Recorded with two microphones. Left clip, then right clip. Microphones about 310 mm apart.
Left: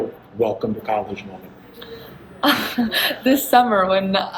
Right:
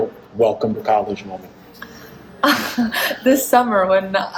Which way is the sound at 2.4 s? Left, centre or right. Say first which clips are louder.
Right 2 dB; centre.